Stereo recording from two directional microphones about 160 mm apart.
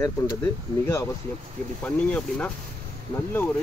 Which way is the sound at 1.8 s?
5° left (ahead or behind).